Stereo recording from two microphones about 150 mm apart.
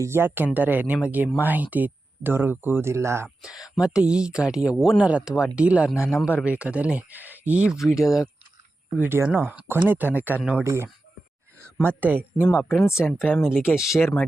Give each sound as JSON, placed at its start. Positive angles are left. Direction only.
{"t": 0.0, "sound": "speech", "side_deg": -15}
{"t": 3.2, "sound": "speech", "side_deg": 0}
{"t": 9.0, "sound": "speech", "side_deg": -15}
{"t": 11.9, "sound": "speech", "side_deg": -10}
{"t": 12.5, "sound": "speech", "side_deg": 15}
{"t": 13.4, "sound": "speech", "side_deg": -5}